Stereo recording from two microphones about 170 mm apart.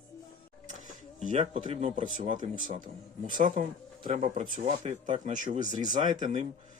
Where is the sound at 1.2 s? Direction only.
45° right (ahead or behind).